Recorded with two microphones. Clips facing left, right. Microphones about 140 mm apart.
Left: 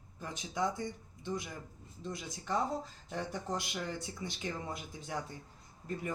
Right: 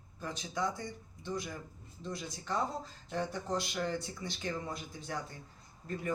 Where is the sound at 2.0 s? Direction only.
15° left (ahead or behind).